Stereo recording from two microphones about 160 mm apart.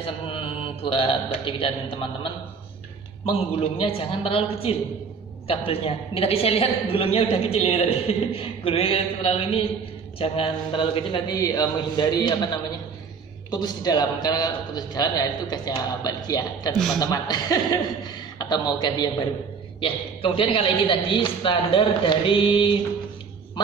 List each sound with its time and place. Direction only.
0.0 s mantra: 35° left (ahead or behind)
0.9 s a woman's voice: 35° left (ahead or behind)
13.5 s a man's voice: 25° left (ahead or behind)